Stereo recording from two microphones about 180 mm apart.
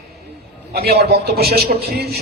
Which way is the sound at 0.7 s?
55° right (ahead or behind).